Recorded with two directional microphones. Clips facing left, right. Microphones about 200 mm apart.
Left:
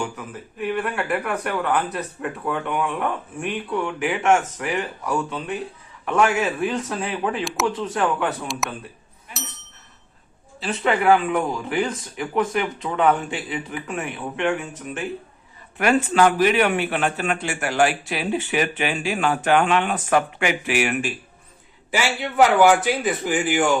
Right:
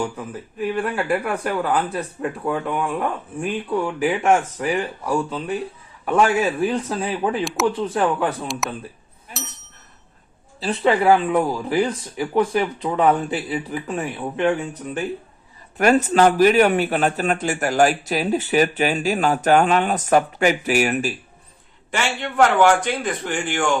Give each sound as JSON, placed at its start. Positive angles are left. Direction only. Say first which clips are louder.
{"t": 0.8, "sound": "a man's voice", "louder": "right 4 dB", "side_deg": -30}
{"t": 7.4, "sound": "a man's voice", "louder": "right 3 dB", "side_deg": 0}
{"t": 7.7, "sound": "a man's voice", "louder": "right 2 dB", "side_deg": -30}
{"t": 9.3, "sound": "bicycle bell", "louder": "right 2 dB", "side_deg": -40}
{"t": 10.6, "sound": "a man's voice", "louder": "right 3 dB", "side_deg": -35}
{"t": 21.9, "sound": "a man's voice", "louder": "left 1 dB", "side_deg": 5}